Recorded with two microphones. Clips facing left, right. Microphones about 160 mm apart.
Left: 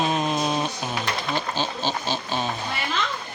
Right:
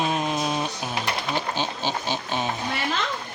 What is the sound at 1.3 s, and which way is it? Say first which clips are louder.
Insect: even; 15° right (ahead or behind).